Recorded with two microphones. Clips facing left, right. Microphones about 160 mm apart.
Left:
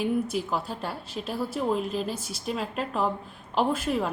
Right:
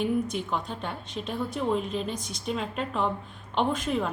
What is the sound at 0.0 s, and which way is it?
A woman's voice, 5° left (ahead or behind).